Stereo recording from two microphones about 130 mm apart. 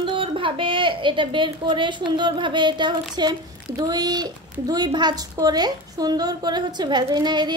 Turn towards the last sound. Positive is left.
turn(degrees=-35)  # may be behind; listen again after turning